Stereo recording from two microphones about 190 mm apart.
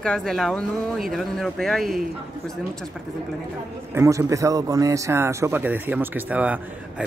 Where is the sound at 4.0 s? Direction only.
15° right (ahead or behind).